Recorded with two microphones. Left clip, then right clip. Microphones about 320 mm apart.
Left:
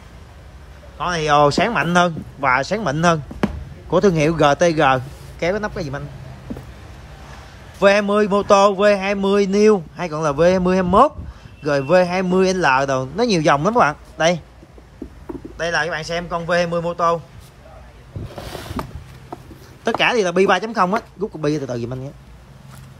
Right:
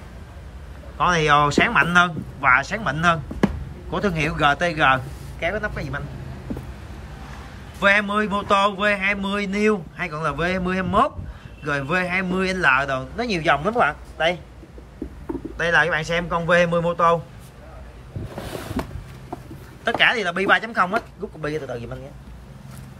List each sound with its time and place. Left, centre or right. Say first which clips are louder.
0.9 s speech: left 1 dB; centre
7.8 s speech: left 4 dB; centre
15.5 s a man's voice: right 2 dB; centre
18.5 s a sound: left 1 dB; centre
19.8 s speech: left 2 dB; centre